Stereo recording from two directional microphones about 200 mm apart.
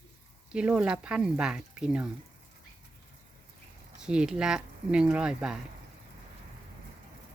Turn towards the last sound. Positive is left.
turn(degrees=-5)  # may be behind; listen again after turning